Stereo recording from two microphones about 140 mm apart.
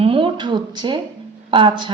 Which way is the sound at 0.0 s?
40° right (ahead or behind).